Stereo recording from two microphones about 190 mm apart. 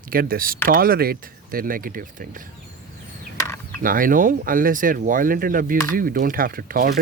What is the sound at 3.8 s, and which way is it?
Speech, 45° right (ahead or behind).